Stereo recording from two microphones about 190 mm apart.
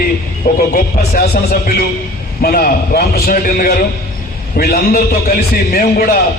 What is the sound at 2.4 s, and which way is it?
A man's voice, 50° left (ahead or behind).